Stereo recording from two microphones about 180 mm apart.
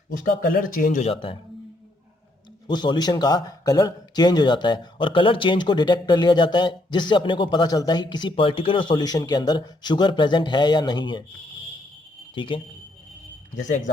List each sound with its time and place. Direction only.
0.1 s speech: 50° left (ahead or behind)
1.1 s speech: 30° left (ahead or behind)
2.6 s speech: 25° left (ahead or behind)
12.3 s speech: 25° left (ahead or behind)